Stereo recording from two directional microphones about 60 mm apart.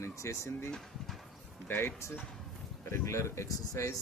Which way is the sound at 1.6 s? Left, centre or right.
Left.